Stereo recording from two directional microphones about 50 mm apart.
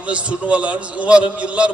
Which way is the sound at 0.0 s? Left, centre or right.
Right.